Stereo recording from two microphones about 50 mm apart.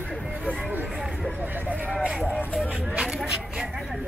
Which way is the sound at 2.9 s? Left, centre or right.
Centre.